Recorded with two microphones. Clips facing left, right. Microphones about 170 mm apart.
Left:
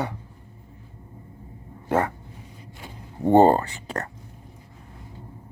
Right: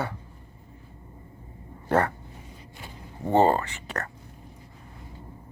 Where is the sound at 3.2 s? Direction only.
35° left (ahead or behind).